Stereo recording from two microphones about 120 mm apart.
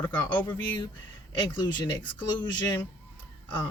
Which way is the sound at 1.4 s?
35° left (ahead or behind).